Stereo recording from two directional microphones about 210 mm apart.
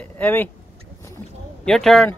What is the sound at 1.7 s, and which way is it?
Speech, centre (ahead or behind).